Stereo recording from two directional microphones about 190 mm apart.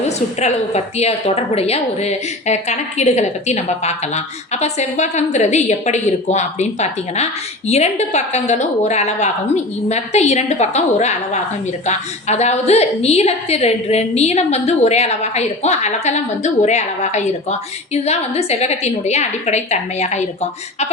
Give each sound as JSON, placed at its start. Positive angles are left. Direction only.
{"t": 0.0, "sound": "a woman's voice", "side_deg": 35}